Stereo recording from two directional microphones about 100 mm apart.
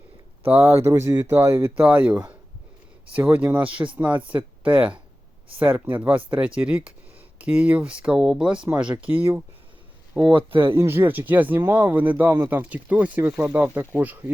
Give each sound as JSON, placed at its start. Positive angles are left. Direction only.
{"t": 0.4, "sound": "speech", "side_deg": -25}